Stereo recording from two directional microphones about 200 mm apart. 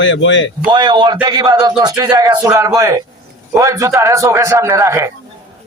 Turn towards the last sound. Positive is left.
turn(degrees=-15)  # may be behind; listen again after turning